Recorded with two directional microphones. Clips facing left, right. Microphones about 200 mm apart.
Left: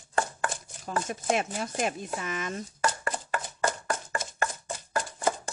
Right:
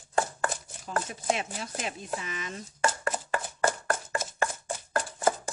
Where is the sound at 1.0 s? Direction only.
50° left (ahead or behind).